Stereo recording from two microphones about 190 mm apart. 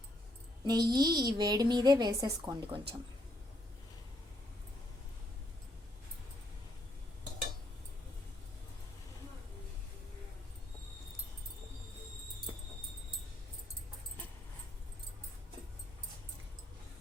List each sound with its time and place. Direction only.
0.6 s a woman's voice: 20° right (ahead or behind)